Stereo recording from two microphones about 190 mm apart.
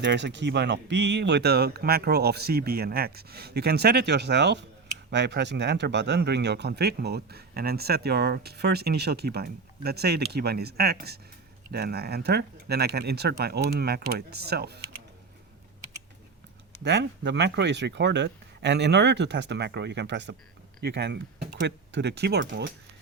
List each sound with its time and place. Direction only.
0.0 s speech: 65° right (ahead or behind)
16.8 s speech: 65° right (ahead or behind)